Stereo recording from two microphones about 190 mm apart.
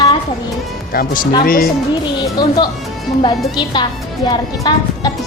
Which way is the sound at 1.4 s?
50° left (ahead or behind).